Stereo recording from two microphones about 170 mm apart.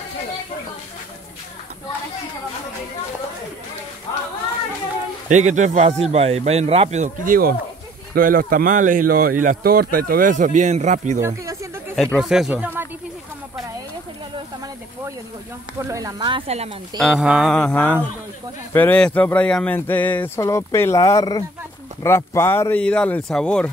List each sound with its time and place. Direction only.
5.3 s speech: 45° right (ahead or behind)
11.1 s snake: 15° right (ahead or behind)
11.9 s speech: centre (ahead or behind)
15.9 s speech: 20° right (ahead or behind); by 16.7 s 40° right (ahead or behind)
17.0 s mantra: centre (ahead or behind)
18.7 s speech: 10° left (ahead or behind)